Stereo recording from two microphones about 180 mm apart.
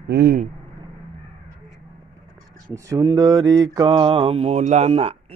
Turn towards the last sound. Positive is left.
turn(degrees=-35)  # may be behind; listen again after turning